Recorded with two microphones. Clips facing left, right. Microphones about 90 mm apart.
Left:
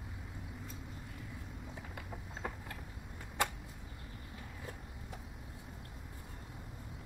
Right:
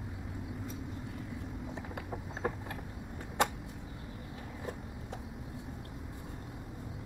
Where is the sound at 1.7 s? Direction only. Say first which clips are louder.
Right 6 dB; 30° right (ahead or behind).